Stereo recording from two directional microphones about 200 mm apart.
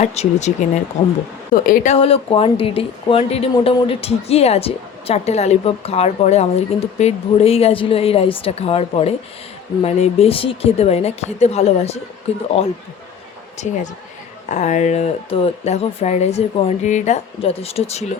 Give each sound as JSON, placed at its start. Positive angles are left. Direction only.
{"t": 0.0, "sound": "speech", "side_deg": 35}
{"t": 1.6, "sound": "a woman's voice", "side_deg": 40}
{"t": 13.6, "sound": "speech", "side_deg": 35}